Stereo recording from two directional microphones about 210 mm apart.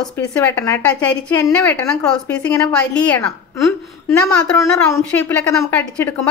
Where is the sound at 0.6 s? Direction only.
10° left (ahead or behind).